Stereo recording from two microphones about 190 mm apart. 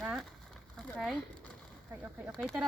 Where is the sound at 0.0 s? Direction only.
Centre (ahead or behind).